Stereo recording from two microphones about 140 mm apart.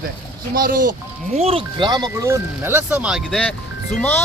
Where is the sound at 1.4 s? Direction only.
45° right (ahead or behind); by 3.4 s 5° right (ahead or behind).